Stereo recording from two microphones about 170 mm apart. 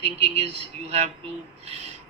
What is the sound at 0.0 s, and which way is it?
A man's voice, 35° right (ahead or behind).